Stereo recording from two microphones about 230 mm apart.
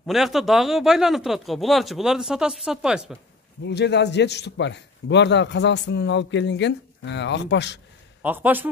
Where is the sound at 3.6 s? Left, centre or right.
Left.